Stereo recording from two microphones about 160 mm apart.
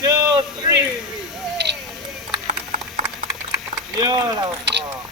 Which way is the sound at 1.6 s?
90° right.